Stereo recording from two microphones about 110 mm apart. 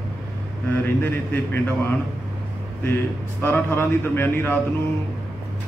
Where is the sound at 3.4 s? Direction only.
20° left (ahead or behind).